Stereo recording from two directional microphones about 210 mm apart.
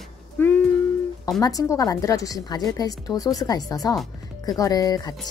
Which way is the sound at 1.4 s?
15° left (ahead or behind).